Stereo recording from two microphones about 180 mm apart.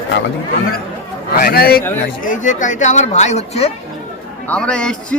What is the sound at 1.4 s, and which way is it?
Speech, 60° left (ahead or behind).